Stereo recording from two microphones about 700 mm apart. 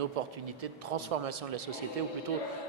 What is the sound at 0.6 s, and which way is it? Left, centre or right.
A man's voice, right.